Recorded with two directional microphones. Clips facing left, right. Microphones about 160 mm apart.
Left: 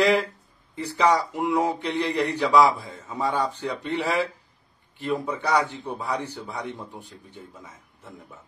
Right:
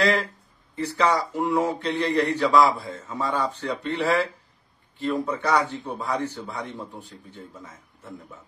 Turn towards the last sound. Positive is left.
turn(degrees=15)  # may be behind; listen again after turning